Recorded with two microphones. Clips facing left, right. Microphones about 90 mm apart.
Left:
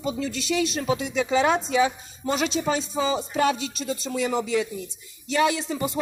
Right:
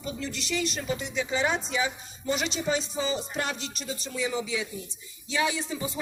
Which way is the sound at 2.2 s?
70° left (ahead or behind).